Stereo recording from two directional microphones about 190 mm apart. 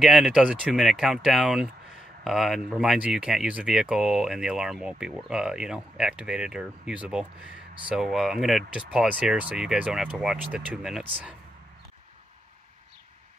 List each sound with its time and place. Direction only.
0.0 s speech: 5° right (ahead or behind)